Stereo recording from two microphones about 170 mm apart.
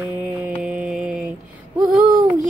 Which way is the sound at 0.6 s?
5° right (ahead or behind).